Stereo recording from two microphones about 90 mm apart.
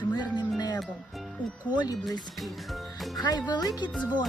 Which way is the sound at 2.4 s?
Centre (ahead or behind).